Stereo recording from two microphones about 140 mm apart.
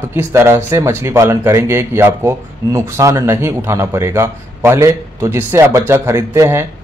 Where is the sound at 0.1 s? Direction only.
20° right (ahead or behind).